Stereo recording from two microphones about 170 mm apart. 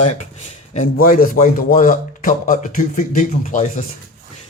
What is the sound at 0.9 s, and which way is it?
A man's voice, 55° left (ahead or behind).